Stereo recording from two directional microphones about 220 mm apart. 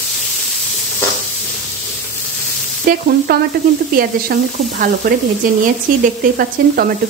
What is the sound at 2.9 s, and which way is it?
Speech, 40° right (ahead or behind).